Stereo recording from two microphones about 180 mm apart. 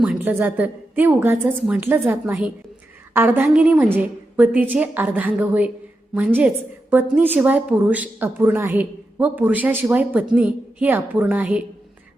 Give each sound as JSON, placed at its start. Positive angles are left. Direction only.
{"t": 0.0, "sound": "a woman's voice", "side_deg": -5}